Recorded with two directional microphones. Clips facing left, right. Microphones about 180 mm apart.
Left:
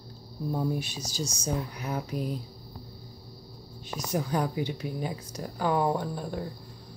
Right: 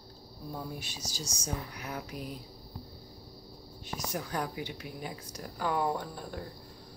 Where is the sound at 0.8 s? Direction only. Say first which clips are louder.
Left 8 dB; 25° left (ahead or behind).